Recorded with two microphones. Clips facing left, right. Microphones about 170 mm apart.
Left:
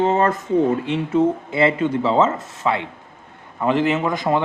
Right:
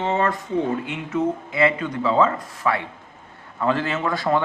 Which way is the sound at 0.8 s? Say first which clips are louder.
Left 5 dB; 30° left (ahead or behind).